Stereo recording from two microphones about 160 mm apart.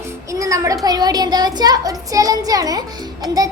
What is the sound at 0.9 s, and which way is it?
A child's voice, 25° right (ahead or behind).